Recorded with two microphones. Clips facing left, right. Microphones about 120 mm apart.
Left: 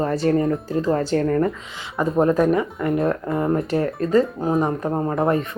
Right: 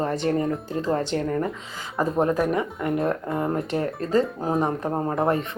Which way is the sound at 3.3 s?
25° right (ahead or behind).